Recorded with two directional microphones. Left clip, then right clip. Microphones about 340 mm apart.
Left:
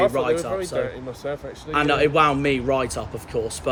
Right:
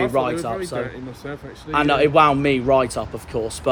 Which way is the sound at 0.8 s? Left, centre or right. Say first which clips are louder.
Left 2 dB; centre.